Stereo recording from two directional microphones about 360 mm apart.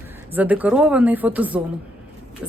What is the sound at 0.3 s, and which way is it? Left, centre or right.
A woman's voice, centre.